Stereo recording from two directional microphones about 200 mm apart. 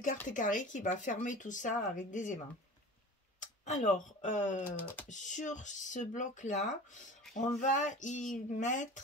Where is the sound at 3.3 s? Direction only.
35° left (ahead or behind).